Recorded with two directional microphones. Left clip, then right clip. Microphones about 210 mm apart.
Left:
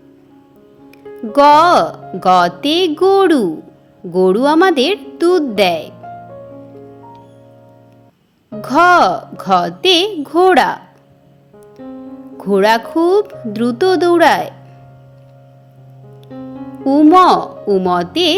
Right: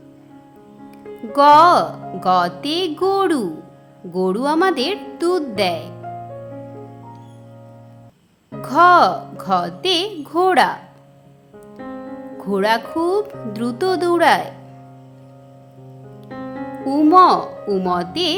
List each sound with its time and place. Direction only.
0.9 s speech: 20° left (ahead or behind)
8.6 s speech: 20° left (ahead or behind)
12.4 s speech: 20° left (ahead or behind)
16.8 s speech: 15° left (ahead or behind)